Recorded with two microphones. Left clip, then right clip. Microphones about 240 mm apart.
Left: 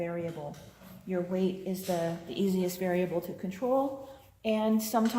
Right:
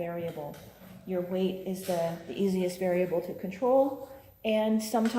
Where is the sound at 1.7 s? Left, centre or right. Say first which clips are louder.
Right 1 dB; left.